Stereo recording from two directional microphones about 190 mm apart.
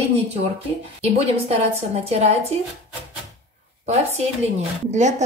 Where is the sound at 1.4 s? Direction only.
35° right (ahead or behind).